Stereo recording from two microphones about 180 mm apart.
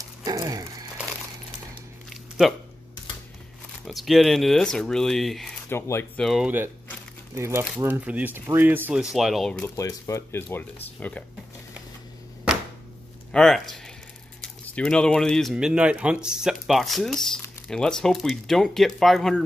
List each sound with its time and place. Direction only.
0.2 s a sound: 20° right (ahead or behind)
2.0 s a sound: centre (ahead or behind)
3.8 s speech: centre (ahead or behind)
5.7 s speech: 15° left (ahead or behind)
6.2 s speech: 5° right (ahead or behind)
9.8 s speech: 15° left (ahead or behind)
13.3 s speech: 5° left (ahead or behind)